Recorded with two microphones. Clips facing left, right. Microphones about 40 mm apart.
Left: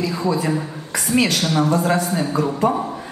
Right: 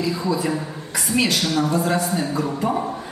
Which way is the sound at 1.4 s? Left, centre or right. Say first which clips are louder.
Left 2 dB; left.